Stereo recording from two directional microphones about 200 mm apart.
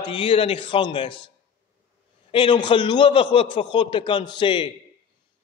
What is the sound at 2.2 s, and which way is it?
A man's voice, 25° left (ahead or behind).